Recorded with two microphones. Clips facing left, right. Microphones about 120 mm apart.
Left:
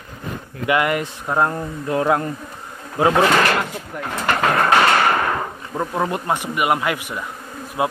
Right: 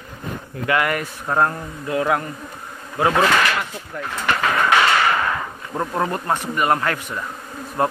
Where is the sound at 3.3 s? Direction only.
45° left (ahead or behind).